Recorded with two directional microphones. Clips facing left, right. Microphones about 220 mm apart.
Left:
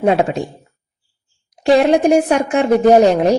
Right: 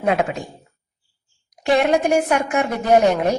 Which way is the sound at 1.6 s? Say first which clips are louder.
Left 5 dB; 35° left (ahead or behind).